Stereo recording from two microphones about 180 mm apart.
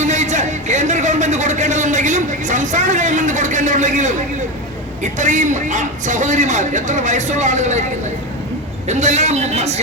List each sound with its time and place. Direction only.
0.0 s a sound: 40° right (ahead or behind)
5.2 s a man's voice: 45° right (ahead or behind)
8.9 s speech: 40° right (ahead or behind)